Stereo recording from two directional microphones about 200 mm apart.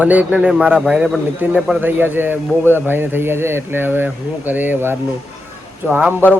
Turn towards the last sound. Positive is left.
turn(degrees=-10)  # may be behind; listen again after turning